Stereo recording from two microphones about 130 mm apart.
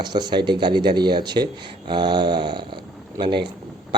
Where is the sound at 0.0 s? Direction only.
35° right (ahead or behind).